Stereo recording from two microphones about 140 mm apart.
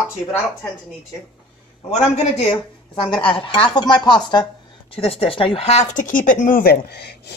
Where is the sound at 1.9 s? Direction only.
50° left (ahead or behind).